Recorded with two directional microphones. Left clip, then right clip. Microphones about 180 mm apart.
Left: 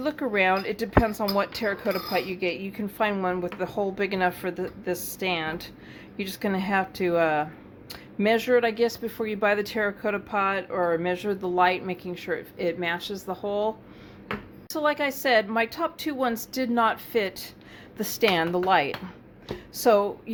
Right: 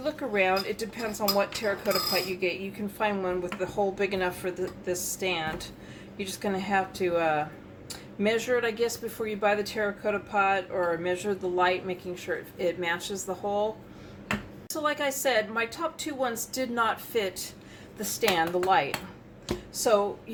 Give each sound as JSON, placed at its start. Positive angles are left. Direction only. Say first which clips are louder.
{"t": 0.0, "sound": "speech", "louder": "left 3 dB", "side_deg": 50}
{"t": 14.7, "sound": "speech", "louder": "left 3 dB", "side_deg": 40}